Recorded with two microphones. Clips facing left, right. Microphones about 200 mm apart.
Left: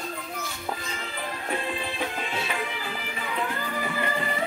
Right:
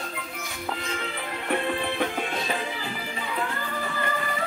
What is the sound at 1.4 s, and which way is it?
Music, 60° right (ahead or behind).